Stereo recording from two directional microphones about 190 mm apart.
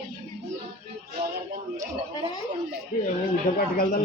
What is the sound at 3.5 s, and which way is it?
Speech, 40° left (ahead or behind).